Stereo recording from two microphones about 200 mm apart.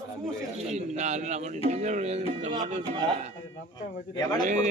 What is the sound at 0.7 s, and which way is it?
Speech, 35° right (ahead or behind).